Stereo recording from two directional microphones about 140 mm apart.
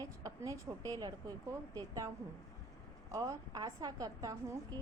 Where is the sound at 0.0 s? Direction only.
25° right (ahead or behind).